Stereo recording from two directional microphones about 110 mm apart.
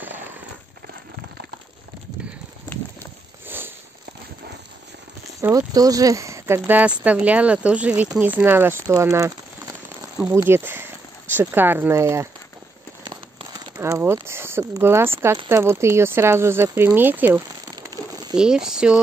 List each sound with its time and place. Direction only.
3.4 s a sound: 20° right (ahead or behind)
5.7 s speech: 35° right (ahead or behind)
6.6 s speech: 10° right (ahead or behind)
8.8 s speech: 30° right (ahead or behind)
10.3 s speech: 20° right (ahead or behind)
13.1 s a sound: 45° right (ahead or behind)
13.7 s speech: 25° right (ahead or behind); by 18.9 s 5° right (ahead or behind)